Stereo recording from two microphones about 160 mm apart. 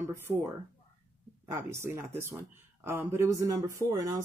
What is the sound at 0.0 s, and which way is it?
Speech, 15° right (ahead or behind).